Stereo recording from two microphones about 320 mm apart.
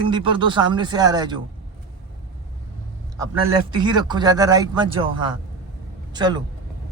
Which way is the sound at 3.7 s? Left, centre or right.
Centre.